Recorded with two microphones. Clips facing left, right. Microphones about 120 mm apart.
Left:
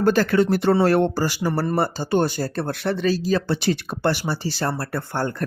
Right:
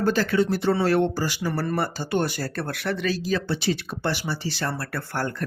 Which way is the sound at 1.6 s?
30° left (ahead or behind).